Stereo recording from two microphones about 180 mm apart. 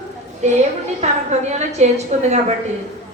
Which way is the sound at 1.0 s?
40° right (ahead or behind).